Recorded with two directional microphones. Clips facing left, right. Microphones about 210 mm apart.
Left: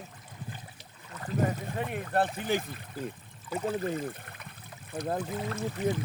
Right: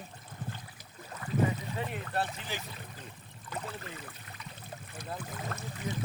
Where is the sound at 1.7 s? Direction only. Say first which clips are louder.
Left 4 dB; 50° left (ahead or behind).